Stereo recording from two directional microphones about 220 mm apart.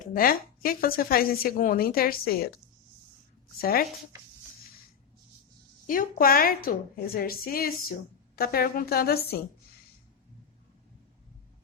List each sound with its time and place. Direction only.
0.1 s a woman's voice: 40° left (ahead or behind)
3.6 s a woman's voice: 45° left (ahead or behind)
5.9 s a woman's voice: 40° left (ahead or behind)